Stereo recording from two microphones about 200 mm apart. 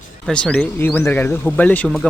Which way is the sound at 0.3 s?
5° left (ahead or behind).